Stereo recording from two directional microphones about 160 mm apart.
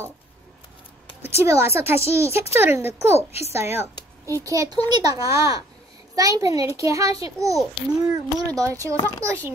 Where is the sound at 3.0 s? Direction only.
40° left (ahead or behind).